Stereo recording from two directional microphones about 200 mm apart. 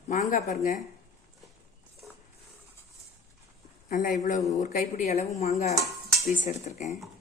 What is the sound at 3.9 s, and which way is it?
A woman's voice, 40° left (ahead or behind).